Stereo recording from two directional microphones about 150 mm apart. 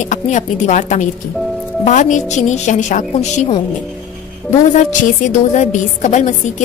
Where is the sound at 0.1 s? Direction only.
55° left (ahead or behind).